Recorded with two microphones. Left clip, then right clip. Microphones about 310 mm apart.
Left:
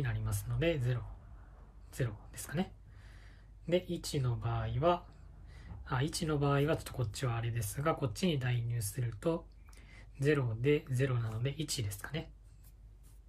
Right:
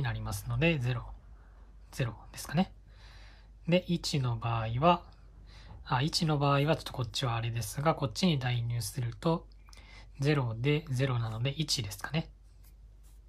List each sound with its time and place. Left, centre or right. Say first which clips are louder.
0.0 s speech: right 4 dB; centre